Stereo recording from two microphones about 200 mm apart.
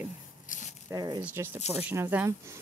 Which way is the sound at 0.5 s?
40° left (ahead or behind).